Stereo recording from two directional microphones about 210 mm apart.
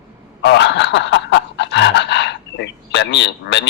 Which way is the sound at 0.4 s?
55° left (ahead or behind).